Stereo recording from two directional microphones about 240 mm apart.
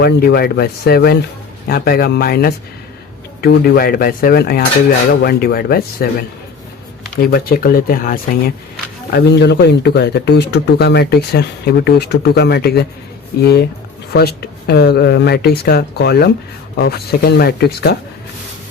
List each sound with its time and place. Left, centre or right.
0.0 s speech: left
7.2 s speech: left